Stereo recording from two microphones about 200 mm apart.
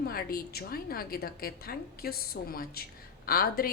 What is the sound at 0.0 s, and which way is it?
A woman's voice, 50° left (ahead or behind).